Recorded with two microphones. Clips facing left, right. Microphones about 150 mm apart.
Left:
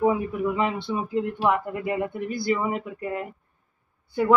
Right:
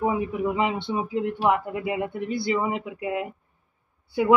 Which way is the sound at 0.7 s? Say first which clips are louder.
Even; 25° right (ahead or behind).